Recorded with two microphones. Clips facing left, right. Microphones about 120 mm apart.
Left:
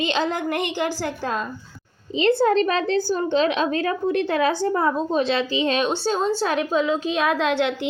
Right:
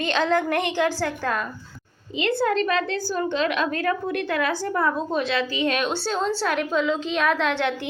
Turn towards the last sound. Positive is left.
turn(degrees=15)  # may be behind; listen again after turning